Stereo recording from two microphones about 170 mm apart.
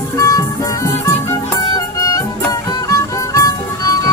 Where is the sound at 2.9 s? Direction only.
20° left (ahead or behind).